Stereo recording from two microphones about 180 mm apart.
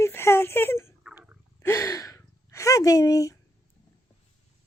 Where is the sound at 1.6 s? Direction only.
15° left (ahead or behind).